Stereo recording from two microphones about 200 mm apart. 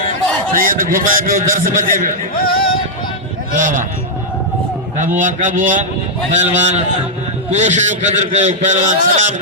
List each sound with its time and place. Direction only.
0.5 s a man's voice: 45° right (ahead or behind)
2.3 s music: 45° left (ahead or behind)
3.5 s a man's voice: 40° right (ahead or behind)
4.9 s a man's voice: 40° right (ahead or behind)